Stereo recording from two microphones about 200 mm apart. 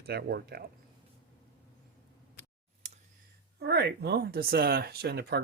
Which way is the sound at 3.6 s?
55° right (ahead or behind).